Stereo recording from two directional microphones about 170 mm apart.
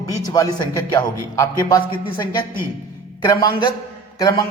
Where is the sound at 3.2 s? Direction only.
20° left (ahead or behind).